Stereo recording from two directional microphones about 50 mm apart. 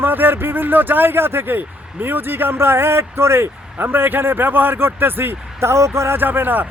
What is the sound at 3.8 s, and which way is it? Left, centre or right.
Speech, right.